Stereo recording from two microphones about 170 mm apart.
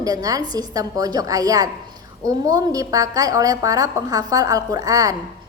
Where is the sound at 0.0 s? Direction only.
20° right (ahead or behind).